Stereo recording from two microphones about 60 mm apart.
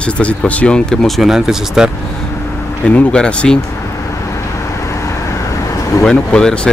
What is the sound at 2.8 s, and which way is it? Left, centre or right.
Speech, centre.